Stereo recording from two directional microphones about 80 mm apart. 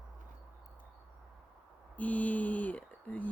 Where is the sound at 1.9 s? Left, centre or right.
Centre.